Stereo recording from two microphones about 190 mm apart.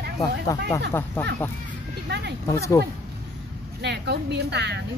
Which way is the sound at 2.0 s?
60° right (ahead or behind).